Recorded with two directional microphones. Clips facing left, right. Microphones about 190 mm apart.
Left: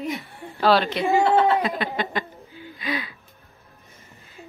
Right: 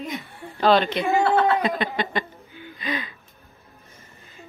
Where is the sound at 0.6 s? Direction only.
5° left (ahead or behind).